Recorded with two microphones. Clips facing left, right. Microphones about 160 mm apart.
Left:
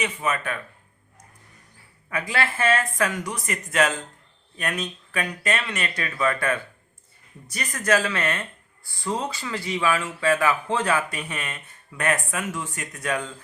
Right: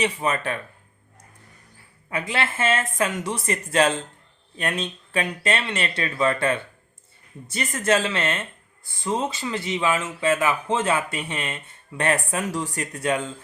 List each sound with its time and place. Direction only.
0.0 s speech: 35° right (ahead or behind)
2.0 s speech: 25° right (ahead or behind)